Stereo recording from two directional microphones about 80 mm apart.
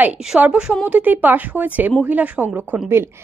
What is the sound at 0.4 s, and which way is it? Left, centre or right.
A woman's voice, centre.